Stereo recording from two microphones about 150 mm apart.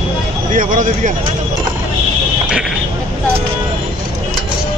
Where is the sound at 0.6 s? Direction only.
60° right (ahead or behind).